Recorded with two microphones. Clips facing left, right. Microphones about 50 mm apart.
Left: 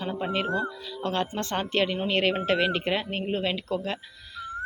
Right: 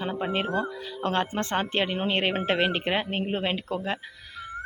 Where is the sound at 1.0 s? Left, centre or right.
Right.